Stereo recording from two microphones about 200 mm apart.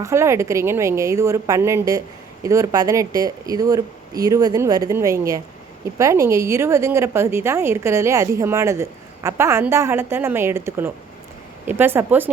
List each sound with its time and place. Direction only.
0.0 s a woman's voice: 15° right (ahead or behind)